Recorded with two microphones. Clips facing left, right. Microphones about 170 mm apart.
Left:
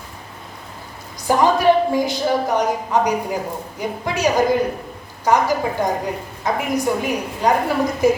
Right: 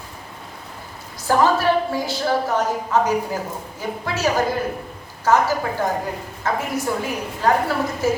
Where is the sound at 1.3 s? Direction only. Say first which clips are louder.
Left 2 dB; 15° left (ahead or behind).